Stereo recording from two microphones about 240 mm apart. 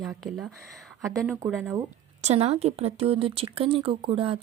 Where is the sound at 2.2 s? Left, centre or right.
Right.